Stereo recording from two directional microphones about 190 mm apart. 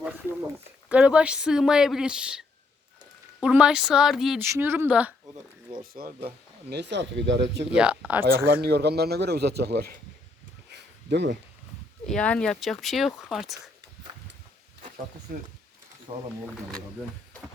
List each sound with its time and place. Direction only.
0.9 s speech: 5° right (ahead or behind)
3.4 s speech: 5° right (ahead or behind)
4.4 s speech: 10° right (ahead or behind)
5.8 s speech: 50° right (ahead or behind); by 7.6 s 65° right (ahead or behind)
7.8 s speech: 5° right (ahead or behind)
8.6 s speech: 60° right (ahead or behind)
10.7 s a sound: 60° right (ahead or behind)
12.0 s speech: 5° left (ahead or behind)
16.1 s speech: 30° right (ahead or behind)